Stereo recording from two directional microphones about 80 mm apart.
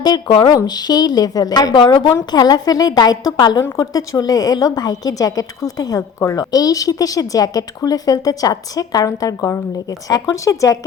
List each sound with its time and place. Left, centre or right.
0.0 s a woman's voice: left